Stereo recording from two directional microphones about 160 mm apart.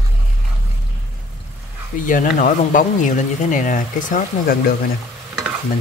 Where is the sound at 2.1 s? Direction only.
55° left (ahead or behind).